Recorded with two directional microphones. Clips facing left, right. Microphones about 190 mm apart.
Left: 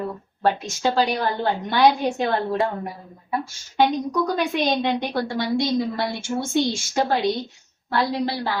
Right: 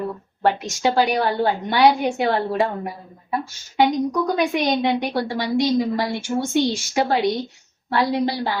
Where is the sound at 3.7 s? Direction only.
15° right (ahead or behind).